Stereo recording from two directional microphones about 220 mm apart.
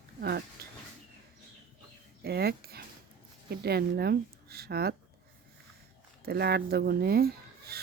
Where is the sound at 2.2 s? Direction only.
45° right (ahead or behind).